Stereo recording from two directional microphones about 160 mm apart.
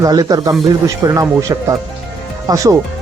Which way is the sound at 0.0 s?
25° right (ahead or behind).